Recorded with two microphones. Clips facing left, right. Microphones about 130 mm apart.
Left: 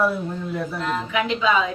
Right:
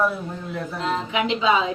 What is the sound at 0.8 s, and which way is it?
Speech, 25° right (ahead or behind).